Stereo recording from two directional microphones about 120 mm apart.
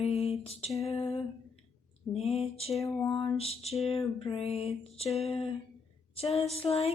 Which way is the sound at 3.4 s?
55° left (ahead or behind).